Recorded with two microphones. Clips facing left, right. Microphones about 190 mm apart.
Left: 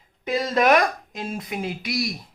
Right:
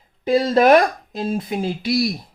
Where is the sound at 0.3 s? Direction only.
30° right (ahead or behind).